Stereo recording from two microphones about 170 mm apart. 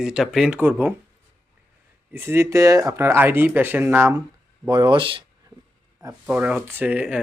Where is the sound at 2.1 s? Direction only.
15° right (ahead or behind).